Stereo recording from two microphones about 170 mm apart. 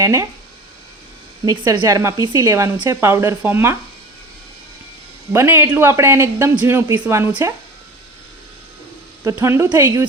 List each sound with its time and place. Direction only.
0.0 s speech: 20° right (ahead or behind)
1.5 s a woman's voice: 20° right (ahead or behind)
5.3 s a woman's voice: 10° right (ahead or behind)
9.3 s a woman's voice: 15° right (ahead or behind)